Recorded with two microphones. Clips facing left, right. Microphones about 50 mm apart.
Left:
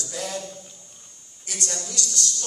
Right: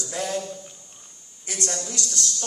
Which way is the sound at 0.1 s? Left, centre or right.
Right.